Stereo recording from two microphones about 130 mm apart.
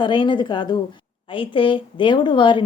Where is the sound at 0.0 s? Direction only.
40° left (ahead or behind).